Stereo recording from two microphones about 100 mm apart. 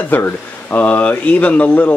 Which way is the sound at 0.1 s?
20° left (ahead or behind).